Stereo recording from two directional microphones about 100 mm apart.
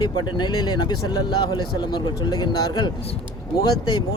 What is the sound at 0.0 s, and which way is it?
Speech, 50° left (ahead or behind).